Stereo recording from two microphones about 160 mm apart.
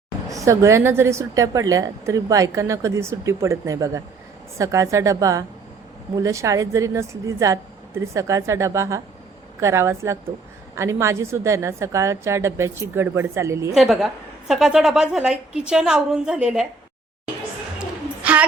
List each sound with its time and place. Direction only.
0.3 s a woman's voice: 20° right (ahead or behind)
13.7 s a woman's voice: centre (ahead or behind)
17.7 s a sound: 10° right (ahead or behind)